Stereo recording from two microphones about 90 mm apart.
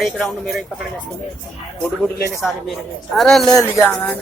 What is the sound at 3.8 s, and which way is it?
Speech, 35° left (ahead or behind).